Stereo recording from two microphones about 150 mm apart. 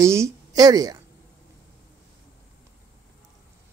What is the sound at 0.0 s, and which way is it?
A woman's voice, 20° right (ahead or behind).